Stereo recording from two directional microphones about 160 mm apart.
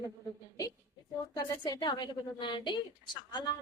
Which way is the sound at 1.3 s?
30° left (ahead or behind).